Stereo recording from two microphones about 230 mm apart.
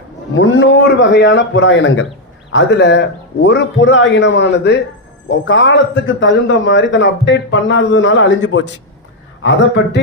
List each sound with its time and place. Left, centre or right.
0.3 s a man's voice: left